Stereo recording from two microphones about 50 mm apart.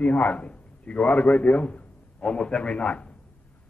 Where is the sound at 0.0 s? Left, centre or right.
Left.